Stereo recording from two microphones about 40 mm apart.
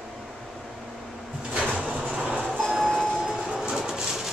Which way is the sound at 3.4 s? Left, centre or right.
Right.